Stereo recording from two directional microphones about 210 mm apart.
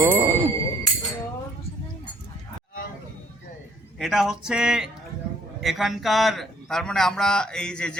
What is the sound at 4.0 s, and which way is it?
A man's voice, centre (ahead or behind).